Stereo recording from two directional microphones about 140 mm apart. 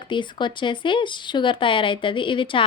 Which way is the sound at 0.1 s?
35° left (ahead or behind).